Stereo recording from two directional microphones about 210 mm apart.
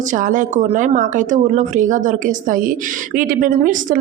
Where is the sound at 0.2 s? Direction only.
40° right (ahead or behind).